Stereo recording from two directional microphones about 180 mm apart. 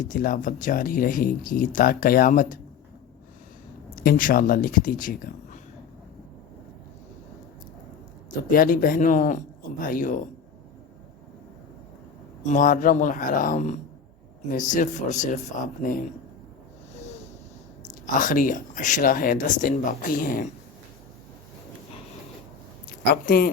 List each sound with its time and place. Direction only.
0.0 s speech: 50° left (ahead or behind)
3.9 s speech: 55° left (ahead or behind)
8.4 s speech: 50° left (ahead or behind)
12.4 s speech: 45° left (ahead or behind)
17.8 s speech: 45° left (ahead or behind)
23.2 s speech: 55° left (ahead or behind)